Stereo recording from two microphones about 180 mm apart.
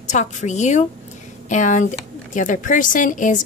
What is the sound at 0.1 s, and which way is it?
A woman's voice, 40° left (ahead or behind).